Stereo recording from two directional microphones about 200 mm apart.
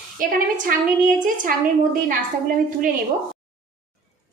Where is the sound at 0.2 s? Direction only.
45° right (ahead or behind).